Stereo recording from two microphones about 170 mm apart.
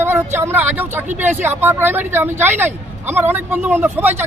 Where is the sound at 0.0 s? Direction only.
15° right (ahead or behind).